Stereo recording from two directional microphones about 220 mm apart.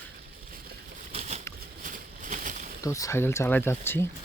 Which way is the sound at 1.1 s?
30° right (ahead or behind).